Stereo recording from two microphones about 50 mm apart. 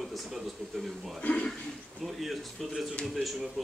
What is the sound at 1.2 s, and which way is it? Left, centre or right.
Speech, left.